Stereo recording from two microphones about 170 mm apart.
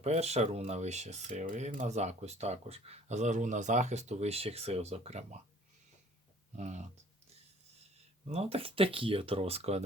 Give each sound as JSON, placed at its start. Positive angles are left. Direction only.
{"t": 0.0, "sound": "speech", "side_deg": -40}
{"t": 6.6, "sound": "speech", "side_deg": -45}
{"t": 8.3, "sound": "speech", "side_deg": -35}